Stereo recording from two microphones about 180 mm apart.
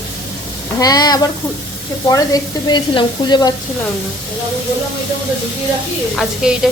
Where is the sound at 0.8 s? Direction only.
20° left (ahead or behind).